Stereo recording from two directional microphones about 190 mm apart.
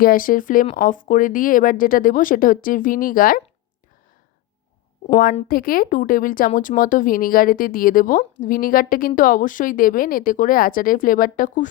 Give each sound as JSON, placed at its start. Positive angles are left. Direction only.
{"t": 0.0, "sound": "speech", "side_deg": 45}
{"t": 5.5, "sound": "speech", "side_deg": 50}